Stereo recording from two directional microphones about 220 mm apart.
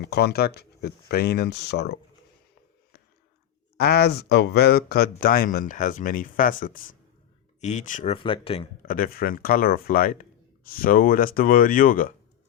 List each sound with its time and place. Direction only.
0.0 s speech: 50° left (ahead or behind)
3.8 s speech: 45° left (ahead or behind); by 8.7 s 25° left (ahead or behind)
8.8 s speech: 40° left (ahead or behind)